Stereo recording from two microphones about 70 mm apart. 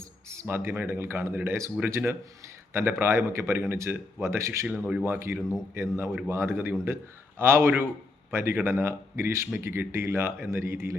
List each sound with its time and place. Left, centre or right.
0.0 s a man's voice: right
4.6 s a man's voice: right